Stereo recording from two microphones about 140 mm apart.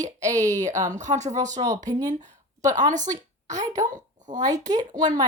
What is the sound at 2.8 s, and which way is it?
A woman's voice, 60° right (ahead or behind).